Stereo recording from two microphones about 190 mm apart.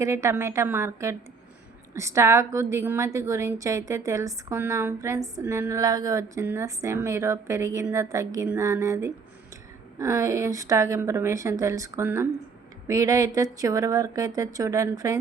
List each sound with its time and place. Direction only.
0.0 s a woman's voice: 15° right (ahead or behind)